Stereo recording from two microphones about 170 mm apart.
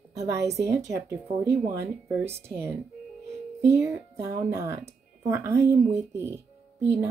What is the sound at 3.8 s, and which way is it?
Speech, 15° right (ahead or behind).